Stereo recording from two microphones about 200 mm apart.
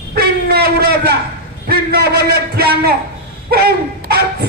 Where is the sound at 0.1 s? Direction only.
55° right (ahead or behind).